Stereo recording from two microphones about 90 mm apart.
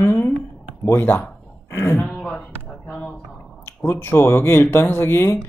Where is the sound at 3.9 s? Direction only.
30° left (ahead or behind).